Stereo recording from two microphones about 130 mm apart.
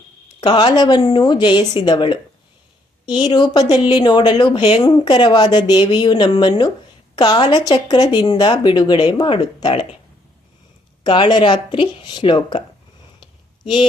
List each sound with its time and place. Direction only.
0.3 s speech: 40° left (ahead or behind)
3.2 s speech: 35° left (ahead or behind)
11.0 s speech: 35° left (ahead or behind)